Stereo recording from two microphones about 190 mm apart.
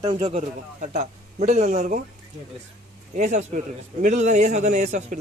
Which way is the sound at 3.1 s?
40° right (ahead or behind).